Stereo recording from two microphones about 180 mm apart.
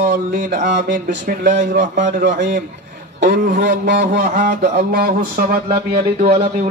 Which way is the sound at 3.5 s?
75° right (ahead or behind).